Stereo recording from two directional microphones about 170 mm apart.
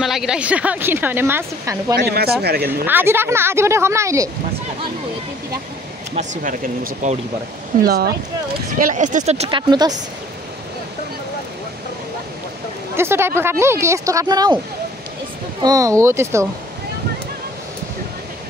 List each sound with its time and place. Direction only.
0.0 s speech: centre (ahead or behind)
2.0 s speech: 70° right (ahead or behind)
2.8 s speech: 10° right (ahead or behind)
6.1 s speech: 50° right (ahead or behind)
7.8 s speech: 65° right (ahead or behind)
8.7 s speech: 50° right (ahead or behind); by 9.9 s 25° right (ahead or behind)
12.9 s speech: 15° right (ahead or behind)
15.6 s speech: 20° right (ahead or behind)